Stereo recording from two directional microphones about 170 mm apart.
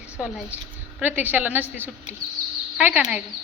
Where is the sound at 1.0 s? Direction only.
10° right (ahead or behind).